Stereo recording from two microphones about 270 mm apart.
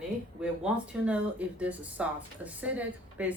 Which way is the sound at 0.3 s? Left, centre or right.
Centre.